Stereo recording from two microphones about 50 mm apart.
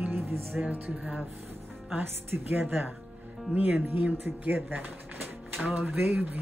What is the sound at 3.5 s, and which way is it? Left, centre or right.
Speech, right.